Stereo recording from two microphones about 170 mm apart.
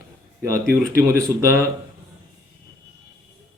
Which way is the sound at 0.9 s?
15° right (ahead or behind).